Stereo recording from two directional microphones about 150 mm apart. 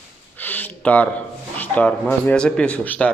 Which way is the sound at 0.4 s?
10° left (ahead or behind).